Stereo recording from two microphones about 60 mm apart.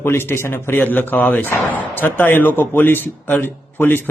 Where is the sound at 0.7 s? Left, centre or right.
Left.